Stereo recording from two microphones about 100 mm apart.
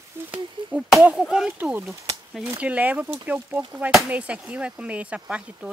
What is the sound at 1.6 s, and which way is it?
Speech, 20° right (ahead or behind).